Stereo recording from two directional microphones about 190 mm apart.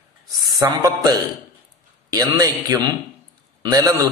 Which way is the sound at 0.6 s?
20° right (ahead or behind).